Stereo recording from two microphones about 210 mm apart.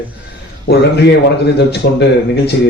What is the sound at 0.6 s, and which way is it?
Speech, 50° left (ahead or behind).